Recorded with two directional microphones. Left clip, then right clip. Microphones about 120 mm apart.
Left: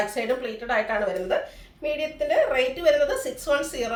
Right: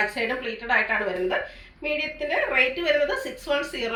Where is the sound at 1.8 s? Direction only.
35° left (ahead or behind).